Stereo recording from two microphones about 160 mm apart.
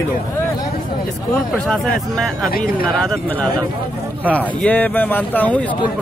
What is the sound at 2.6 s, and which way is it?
Speech, 5° left (ahead or behind).